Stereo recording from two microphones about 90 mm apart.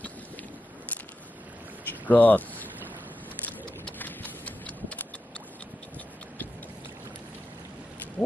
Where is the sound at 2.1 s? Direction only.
20° left (ahead or behind).